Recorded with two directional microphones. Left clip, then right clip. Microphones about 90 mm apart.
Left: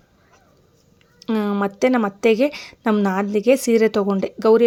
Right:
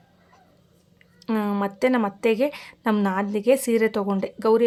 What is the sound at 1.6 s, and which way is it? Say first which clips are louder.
A woman's voice: left 4 dB; 40° left (ahead or behind).